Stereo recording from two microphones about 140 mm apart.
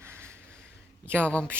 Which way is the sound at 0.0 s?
20° right (ahead or behind).